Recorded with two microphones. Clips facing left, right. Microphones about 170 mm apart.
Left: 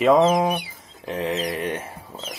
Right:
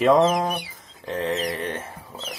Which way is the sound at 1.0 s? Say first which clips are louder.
Even; 10° left (ahead or behind).